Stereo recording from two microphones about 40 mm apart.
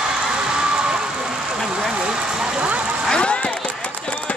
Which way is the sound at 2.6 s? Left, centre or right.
Right.